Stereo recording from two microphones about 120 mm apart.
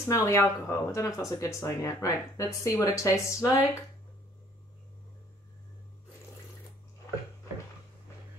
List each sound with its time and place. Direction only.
0.0 s speech: 25° left (ahead or behind)